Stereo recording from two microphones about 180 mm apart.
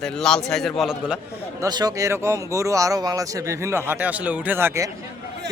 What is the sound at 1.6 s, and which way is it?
Speech, 20° right (ahead or behind).